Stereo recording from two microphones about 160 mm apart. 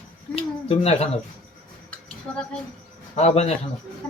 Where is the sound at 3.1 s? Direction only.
40° left (ahead or behind).